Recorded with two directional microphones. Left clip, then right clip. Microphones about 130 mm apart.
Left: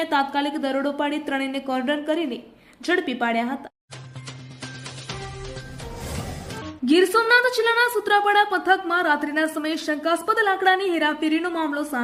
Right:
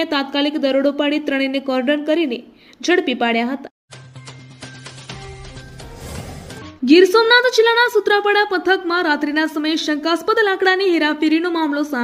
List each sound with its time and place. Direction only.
0.0 s speech: 20° right (ahead or behind)
6.1 s music: centre (ahead or behind)
6.8 s speech: 20° right (ahead or behind)